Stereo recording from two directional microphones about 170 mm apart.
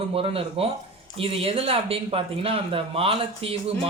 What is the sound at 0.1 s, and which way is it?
Speech, 35° right (ahead or behind).